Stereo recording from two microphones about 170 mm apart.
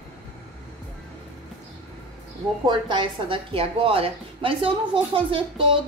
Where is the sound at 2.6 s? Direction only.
25° right (ahead or behind).